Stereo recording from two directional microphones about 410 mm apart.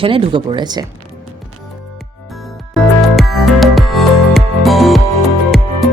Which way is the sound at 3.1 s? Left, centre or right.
Centre.